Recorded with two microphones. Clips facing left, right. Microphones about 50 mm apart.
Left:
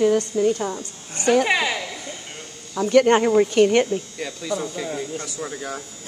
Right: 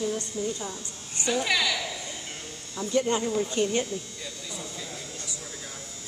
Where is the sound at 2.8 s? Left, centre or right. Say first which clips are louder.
Left 10 dB; left.